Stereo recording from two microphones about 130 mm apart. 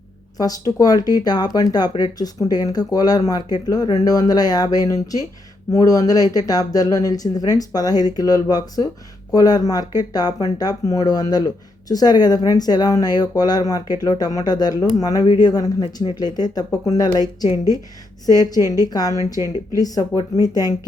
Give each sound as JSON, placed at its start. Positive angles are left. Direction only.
{"t": 0.3, "sound": "speech", "side_deg": 30}